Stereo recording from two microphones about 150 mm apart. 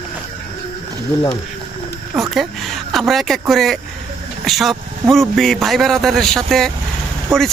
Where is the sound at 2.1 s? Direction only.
Centre (ahead or behind).